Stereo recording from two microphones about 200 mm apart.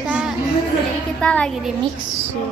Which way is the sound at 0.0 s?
5° right (ahead or behind).